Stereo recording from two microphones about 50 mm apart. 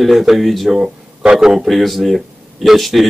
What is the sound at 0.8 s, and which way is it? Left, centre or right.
Speech, centre.